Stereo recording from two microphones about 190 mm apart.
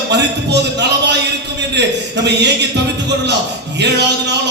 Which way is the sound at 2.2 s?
65° right (ahead or behind).